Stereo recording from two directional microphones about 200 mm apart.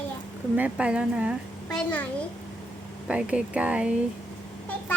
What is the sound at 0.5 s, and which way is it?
Speech, 5° right (ahead or behind).